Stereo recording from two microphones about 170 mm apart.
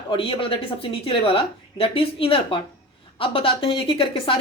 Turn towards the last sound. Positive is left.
turn(degrees=30)  # may be behind; listen again after turning